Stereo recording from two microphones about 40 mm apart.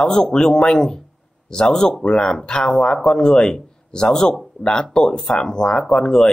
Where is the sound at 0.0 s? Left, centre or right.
Centre.